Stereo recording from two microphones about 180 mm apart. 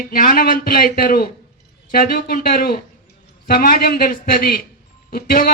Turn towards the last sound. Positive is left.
turn(degrees=55)  # may be behind; listen again after turning